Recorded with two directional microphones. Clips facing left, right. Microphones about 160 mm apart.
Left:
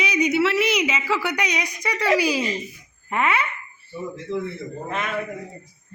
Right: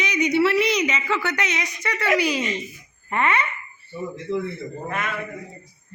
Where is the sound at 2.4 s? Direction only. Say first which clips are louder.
Left 1 dB; 35° left (ahead or behind).